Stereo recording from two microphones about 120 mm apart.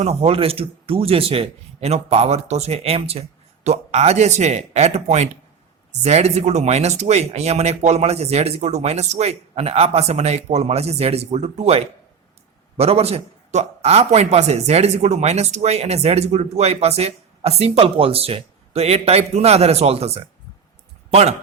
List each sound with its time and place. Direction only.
0.0 s a man's voice: 55° right (ahead or behind)